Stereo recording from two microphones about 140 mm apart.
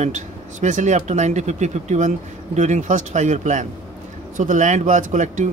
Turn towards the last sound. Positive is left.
turn(degrees=-65)  # may be behind; listen again after turning